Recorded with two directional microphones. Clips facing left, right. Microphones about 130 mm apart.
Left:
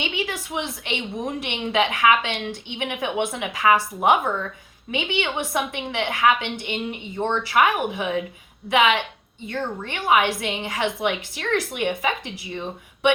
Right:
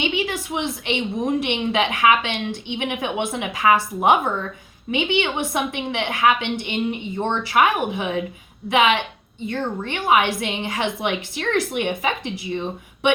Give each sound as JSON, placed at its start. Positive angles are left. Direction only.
{"t": 0.0, "sound": "a woman's voice", "side_deg": -20}